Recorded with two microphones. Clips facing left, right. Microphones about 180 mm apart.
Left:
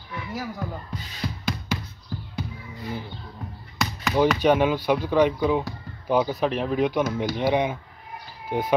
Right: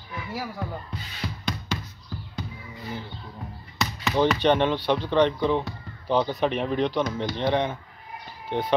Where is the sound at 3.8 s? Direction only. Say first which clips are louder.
Left 1 dB; centre (ahead or behind).